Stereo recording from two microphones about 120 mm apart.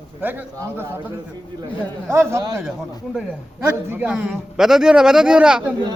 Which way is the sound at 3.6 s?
15° right (ahead or behind).